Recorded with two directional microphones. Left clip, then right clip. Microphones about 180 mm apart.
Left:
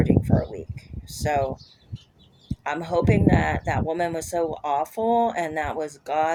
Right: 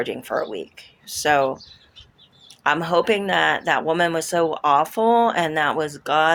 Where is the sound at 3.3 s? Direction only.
50° right (ahead or behind).